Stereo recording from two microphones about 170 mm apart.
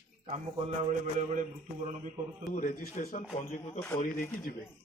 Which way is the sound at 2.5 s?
50° left (ahead or behind).